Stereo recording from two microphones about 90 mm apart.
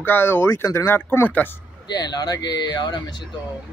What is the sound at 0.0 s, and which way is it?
Speech, 25° left (ahead or behind).